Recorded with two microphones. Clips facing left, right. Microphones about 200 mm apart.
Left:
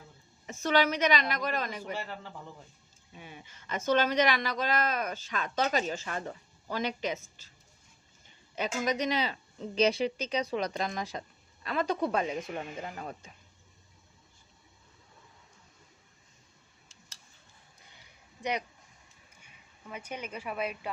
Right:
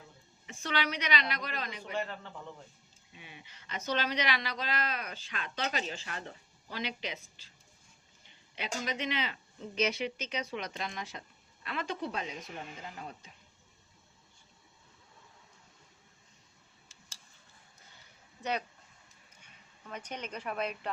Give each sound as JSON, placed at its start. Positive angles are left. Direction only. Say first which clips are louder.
{"t": 0.4, "sound": "a woman's voice", "louder": "left 8 dB", "side_deg": 45}
{"t": 3.1, "sound": "a woman's voice", "louder": "left 5 dB", "side_deg": 45}
{"t": 8.8, "sound": "speech", "louder": "left 6 dB", "side_deg": 45}
{"t": 17.8, "sound": "a sound", "louder": "left 2 dB", "side_deg": 15}
{"t": 19.9, "sound": "a woman's voice", "louder": "left 1 dB", "side_deg": 10}